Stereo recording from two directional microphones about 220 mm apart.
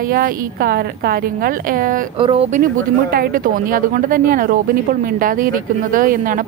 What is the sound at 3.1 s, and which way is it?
Speech, 40° right (ahead or behind).